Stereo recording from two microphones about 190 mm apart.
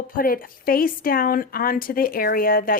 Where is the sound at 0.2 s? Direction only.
50° left (ahead or behind).